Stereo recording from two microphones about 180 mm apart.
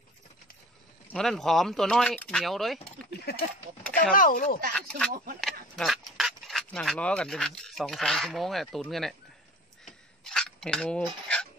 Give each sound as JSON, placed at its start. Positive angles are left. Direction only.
{"t": 1.0, "sound": "speech", "side_deg": 5}
{"t": 3.1, "sound": "speech", "side_deg": 60}
{"t": 4.1, "sound": "speech", "side_deg": 50}
{"t": 4.7, "sound": "speech", "side_deg": 5}
{"t": 5.1, "sound": "speech", "side_deg": -55}
{"t": 5.4, "sound": "speech", "side_deg": 0}
{"t": 10.2, "sound": "a sound", "side_deg": 5}